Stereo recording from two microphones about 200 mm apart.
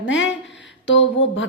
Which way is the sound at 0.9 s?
65° left (ahead or behind).